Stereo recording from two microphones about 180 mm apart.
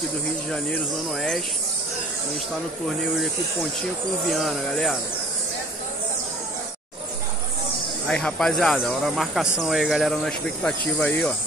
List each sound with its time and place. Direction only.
4.3 s speech: centre (ahead or behind)
8.1 s speech: 5° left (ahead or behind)